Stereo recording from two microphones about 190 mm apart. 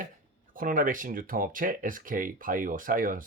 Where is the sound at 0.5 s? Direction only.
45° right (ahead or behind).